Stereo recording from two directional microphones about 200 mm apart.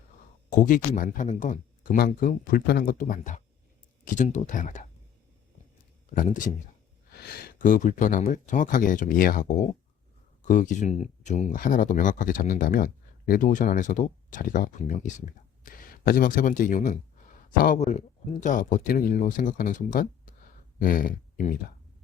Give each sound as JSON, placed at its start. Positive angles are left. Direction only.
{"t": 0.5, "sound": "speech", "side_deg": 40}
{"t": 6.1, "sound": "speech", "side_deg": 40}